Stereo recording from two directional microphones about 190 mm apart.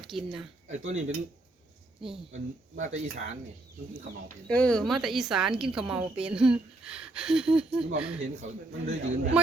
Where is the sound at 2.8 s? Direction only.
40° right (ahead or behind).